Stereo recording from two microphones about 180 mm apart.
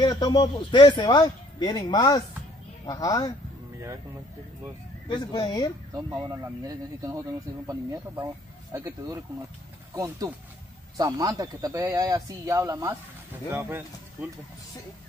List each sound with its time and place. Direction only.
0.0 s speech: 20° left (ahead or behind)
5.0 s speech: 25° left (ahead or behind)
5.9 s speech: 20° right (ahead or behind)